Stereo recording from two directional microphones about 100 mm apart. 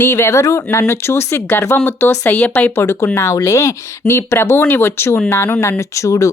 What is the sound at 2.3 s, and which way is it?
Speech, 15° left (ahead or behind).